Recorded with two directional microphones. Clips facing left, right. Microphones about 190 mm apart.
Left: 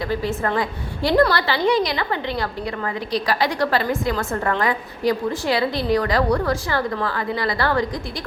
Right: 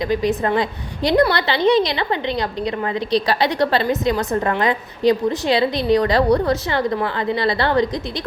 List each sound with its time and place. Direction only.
0.0 s a woman's voice: 15° right (ahead or behind)